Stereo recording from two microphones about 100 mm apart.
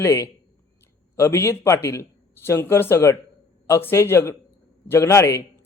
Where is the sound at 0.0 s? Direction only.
30° left (ahead or behind).